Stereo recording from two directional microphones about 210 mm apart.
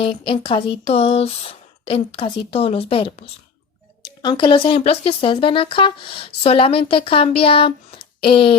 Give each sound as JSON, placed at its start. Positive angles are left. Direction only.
{"t": 0.0, "sound": "speech", "side_deg": 25}